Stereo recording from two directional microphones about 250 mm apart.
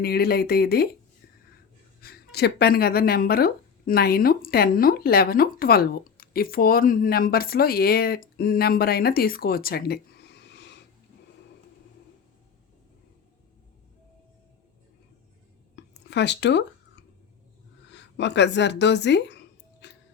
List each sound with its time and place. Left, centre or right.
0.0 s speech: left
2.0 s speech: left
15.7 s whispering: left
17.9 s speech: left
19.8 s music: left